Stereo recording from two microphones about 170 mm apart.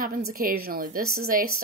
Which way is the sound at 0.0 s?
55° right (ahead or behind).